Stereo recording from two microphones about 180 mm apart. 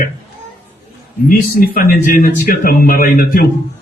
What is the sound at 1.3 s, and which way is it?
A man's voice, 55° left (ahead or behind).